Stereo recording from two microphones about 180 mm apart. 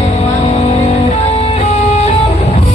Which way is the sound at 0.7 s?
35° left (ahead or behind).